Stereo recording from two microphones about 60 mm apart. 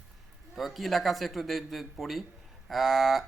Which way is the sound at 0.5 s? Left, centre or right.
Centre.